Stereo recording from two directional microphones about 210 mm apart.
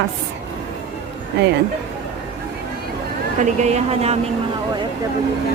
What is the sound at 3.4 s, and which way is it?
Speech, 35° right (ahead or behind).